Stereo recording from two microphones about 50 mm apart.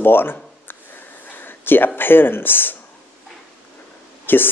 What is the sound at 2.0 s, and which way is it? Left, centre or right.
Speech, left.